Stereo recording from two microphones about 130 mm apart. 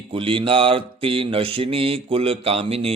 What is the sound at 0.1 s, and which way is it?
Mantra, 40° right (ahead or behind).